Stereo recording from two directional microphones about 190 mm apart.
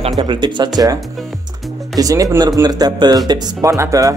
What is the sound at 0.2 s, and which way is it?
Speech, 25° right (ahead or behind).